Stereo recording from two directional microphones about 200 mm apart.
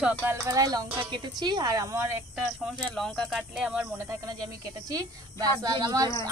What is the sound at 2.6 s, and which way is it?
A woman's voice, centre (ahead or behind).